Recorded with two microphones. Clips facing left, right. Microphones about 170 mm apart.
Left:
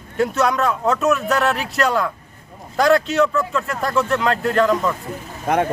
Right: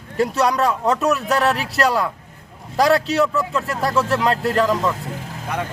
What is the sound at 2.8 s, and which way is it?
Speech, centre (ahead or behind).